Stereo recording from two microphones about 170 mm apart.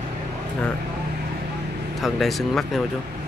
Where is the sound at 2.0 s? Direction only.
Centre (ahead or behind).